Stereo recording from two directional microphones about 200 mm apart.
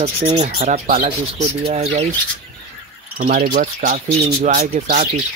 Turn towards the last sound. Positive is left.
turn(degrees=-35)  # may be behind; listen again after turning